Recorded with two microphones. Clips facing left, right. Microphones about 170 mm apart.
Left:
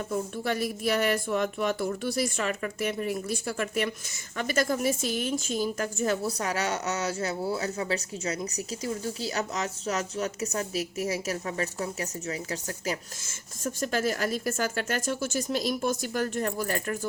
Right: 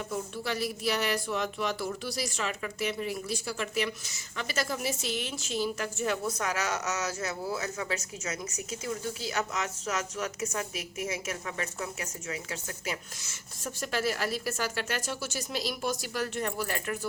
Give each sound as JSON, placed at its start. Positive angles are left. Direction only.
{"t": 0.1, "sound": "speech", "side_deg": 50}